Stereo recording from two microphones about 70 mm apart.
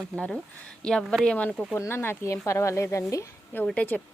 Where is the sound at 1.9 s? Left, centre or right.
Left.